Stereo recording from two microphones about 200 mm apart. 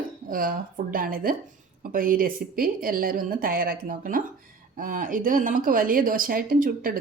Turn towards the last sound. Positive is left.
turn(degrees=-45)  # may be behind; listen again after turning